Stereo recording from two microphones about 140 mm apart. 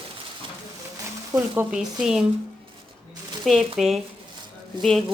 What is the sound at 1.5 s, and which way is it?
Speech, 10° right (ahead or behind).